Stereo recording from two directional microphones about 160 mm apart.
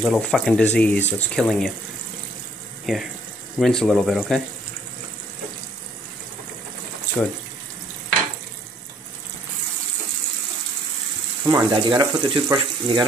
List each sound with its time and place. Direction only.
0.0 s speech: centre (ahead or behind)
2.9 s speech: 5° left (ahead or behind)
7.2 s speech: 5° left (ahead or behind)
11.4 s speech: 25° right (ahead or behind)